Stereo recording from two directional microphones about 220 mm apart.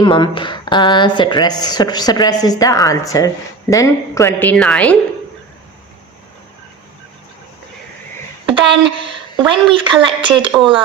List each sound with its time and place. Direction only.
0.0 s a woman's voice: 20° left (ahead or behind); by 4.9 s 5° left (ahead or behind)
8.4 s a woman's voice: 25° right (ahead or behind)